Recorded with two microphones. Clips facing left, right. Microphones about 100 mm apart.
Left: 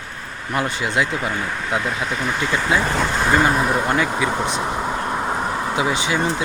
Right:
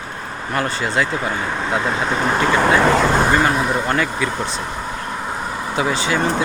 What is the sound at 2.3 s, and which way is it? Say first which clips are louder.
Speech: right 5 dB; 55° right (ahead or behind).